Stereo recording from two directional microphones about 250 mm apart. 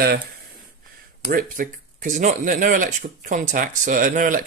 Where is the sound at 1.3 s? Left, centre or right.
Right.